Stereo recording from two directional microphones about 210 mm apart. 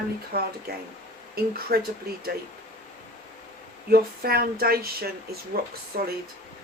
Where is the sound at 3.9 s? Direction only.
45° right (ahead or behind).